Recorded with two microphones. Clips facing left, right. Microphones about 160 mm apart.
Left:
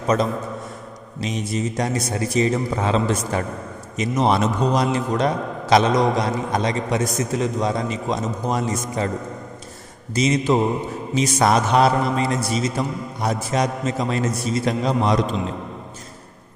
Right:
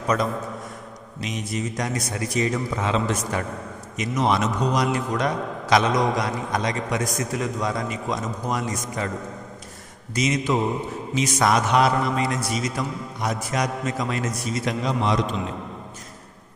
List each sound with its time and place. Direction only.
0.0 s a man's voice: 25° left (ahead or behind)
10.2 s a man's voice: 30° left (ahead or behind)